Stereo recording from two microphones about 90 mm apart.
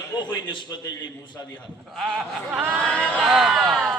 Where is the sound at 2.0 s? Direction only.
5° right (ahead or behind).